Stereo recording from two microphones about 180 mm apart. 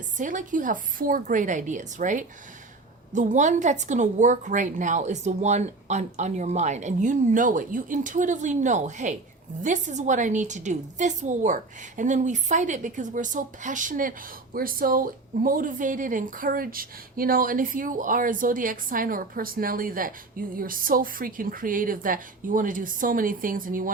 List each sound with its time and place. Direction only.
0.2 s a woman's voice: 45° right (ahead or behind)